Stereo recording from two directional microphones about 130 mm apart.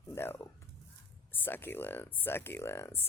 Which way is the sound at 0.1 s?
20° left (ahead or behind).